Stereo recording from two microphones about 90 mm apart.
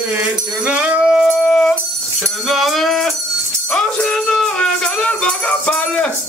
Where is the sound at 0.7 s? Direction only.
10° right (ahead or behind).